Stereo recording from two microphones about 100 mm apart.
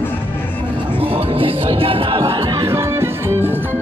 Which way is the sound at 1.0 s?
70° right (ahead or behind).